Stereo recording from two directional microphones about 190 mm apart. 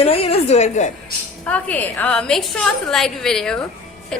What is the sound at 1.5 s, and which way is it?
A woman's voice, 5° left (ahead or behind).